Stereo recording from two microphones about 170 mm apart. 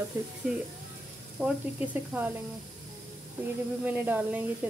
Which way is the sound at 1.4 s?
10° right (ahead or behind).